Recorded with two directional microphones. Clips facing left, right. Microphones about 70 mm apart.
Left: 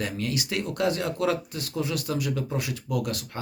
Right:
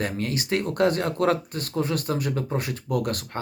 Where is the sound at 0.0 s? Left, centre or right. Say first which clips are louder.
Right 2 dB; right.